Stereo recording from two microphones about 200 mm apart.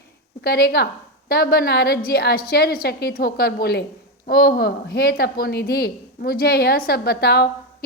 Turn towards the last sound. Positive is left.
turn(degrees=50)  # may be behind; listen again after turning